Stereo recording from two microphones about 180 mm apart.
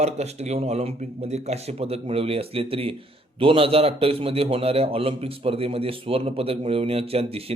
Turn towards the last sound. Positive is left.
turn(degrees=-35)  # may be behind; listen again after turning